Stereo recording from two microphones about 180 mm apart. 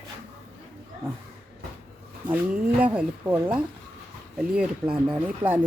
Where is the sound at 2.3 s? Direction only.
10° right (ahead or behind).